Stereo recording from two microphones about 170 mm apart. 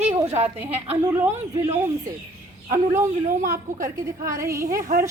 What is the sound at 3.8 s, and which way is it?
A woman's voice, 20° right (ahead or behind).